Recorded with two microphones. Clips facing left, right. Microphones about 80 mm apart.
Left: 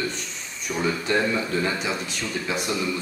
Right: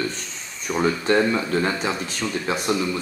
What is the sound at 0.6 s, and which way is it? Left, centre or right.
Speech, right.